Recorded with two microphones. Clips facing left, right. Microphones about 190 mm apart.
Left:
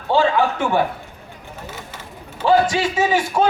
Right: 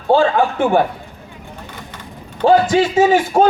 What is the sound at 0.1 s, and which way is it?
Speech, 50° right (ahead or behind).